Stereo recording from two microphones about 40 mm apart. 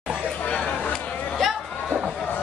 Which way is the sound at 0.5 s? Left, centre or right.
Centre.